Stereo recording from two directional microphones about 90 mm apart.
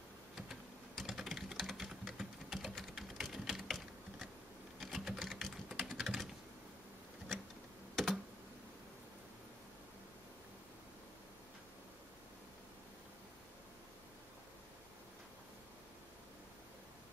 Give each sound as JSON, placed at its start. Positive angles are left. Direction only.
{"t": 0.5, "sound": "typing", "side_deg": 0}
{"t": 7.9, "sound": "computer keyboard", "side_deg": 5}